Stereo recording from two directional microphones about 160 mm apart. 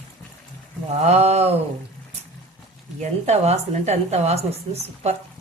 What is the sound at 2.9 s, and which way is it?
A woman's voice, 45° right (ahead or behind).